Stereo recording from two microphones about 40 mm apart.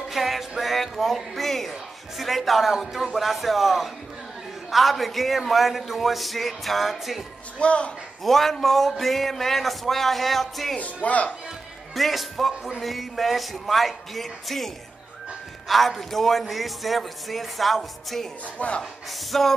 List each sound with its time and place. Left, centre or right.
0.1 s speech: centre
7.5 s speech: left
8.2 s speech: centre
10.8 s speech: left
11.9 s speech: centre
15.7 s speech: centre
18.6 s speech: left
19.3 s music: centre